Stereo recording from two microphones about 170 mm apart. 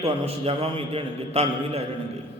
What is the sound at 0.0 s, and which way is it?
A man's voice, 35° right (ahead or behind).